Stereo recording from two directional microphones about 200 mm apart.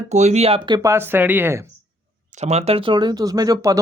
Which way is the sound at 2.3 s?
35° right (ahead or behind).